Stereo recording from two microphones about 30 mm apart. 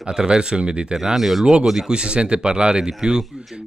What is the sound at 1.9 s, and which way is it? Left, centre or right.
Speech, right.